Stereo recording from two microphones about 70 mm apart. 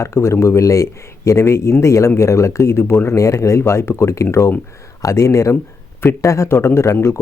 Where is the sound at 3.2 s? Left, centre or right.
Left.